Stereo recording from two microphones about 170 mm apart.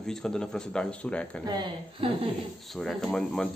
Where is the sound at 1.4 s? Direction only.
25° right (ahead or behind).